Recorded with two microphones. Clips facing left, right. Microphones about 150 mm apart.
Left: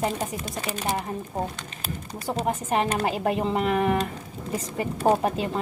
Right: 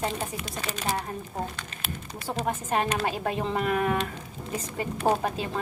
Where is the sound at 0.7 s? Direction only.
20° left (ahead or behind).